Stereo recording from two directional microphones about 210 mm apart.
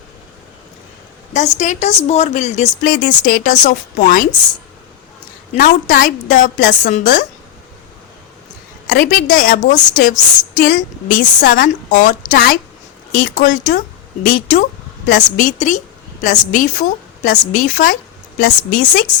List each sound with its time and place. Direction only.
1.3 s a woman's voice: 35° left (ahead or behind)
5.5 s a woman's voice: 40° left (ahead or behind)
8.9 s a woman's voice: 40° left (ahead or behind)